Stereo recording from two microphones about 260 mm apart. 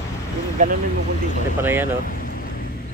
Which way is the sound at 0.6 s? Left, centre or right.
Right.